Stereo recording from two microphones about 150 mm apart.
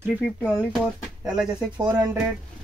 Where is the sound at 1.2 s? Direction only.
30° right (ahead or behind).